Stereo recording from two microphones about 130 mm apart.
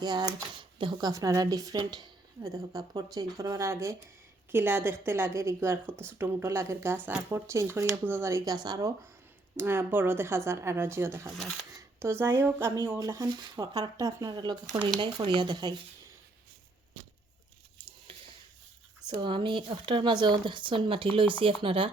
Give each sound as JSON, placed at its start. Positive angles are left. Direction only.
{"t": 0.0, "sound": "speech", "side_deg": -30}
{"t": 9.6, "sound": "a woman's voice", "side_deg": -20}
{"t": 19.0, "sound": "speech", "side_deg": -40}